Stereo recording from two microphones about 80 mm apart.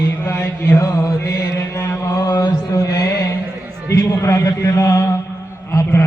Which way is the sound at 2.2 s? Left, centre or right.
Left.